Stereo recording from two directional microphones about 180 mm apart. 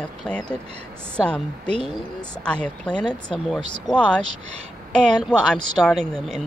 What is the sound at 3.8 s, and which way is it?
Speech, 5° left (ahead or behind).